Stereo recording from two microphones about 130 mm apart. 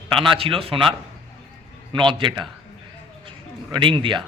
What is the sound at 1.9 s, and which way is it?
Speech, 40° right (ahead or behind).